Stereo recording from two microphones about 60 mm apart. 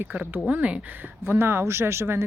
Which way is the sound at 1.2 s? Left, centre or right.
Right.